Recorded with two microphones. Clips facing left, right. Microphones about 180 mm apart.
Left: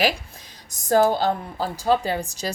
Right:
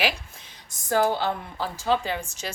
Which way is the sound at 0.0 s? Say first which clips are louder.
Left 4 dB; 40° left (ahead or behind).